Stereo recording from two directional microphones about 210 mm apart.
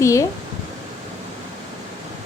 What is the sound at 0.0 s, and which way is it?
Speech, 15° left (ahead or behind).